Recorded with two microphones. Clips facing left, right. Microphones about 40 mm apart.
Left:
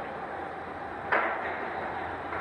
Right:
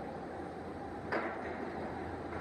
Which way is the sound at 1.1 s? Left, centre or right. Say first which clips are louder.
Left 10 dB; left.